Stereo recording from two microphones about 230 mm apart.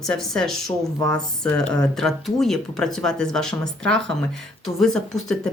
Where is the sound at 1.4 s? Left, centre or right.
Centre.